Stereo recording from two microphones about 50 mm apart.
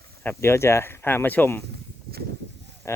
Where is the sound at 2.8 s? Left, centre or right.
Left.